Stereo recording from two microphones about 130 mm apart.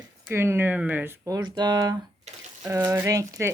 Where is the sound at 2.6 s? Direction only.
20° right (ahead or behind).